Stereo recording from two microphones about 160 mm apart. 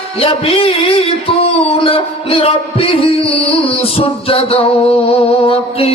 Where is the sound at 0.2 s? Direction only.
35° left (ahead or behind).